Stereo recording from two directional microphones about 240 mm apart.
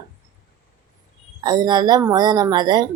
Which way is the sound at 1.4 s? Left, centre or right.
Centre.